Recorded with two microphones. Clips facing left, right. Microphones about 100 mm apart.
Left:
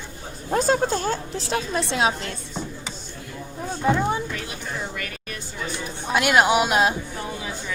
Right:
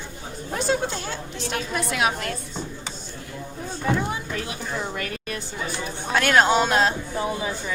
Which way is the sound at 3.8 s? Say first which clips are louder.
Left 4 dB; 30° left (ahead or behind).